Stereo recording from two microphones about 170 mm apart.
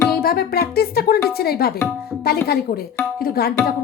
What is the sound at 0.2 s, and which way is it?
Speech, 65° left (ahead or behind).